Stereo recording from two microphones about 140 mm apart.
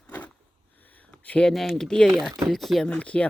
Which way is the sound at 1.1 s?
10° left (ahead or behind).